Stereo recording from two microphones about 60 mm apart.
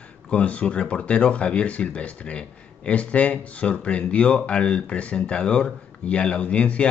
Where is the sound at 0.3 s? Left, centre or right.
Left.